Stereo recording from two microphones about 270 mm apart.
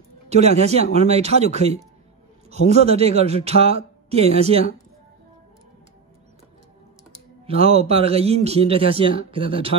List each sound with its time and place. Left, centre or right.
0.3 s speech: right
7.4 s speech: right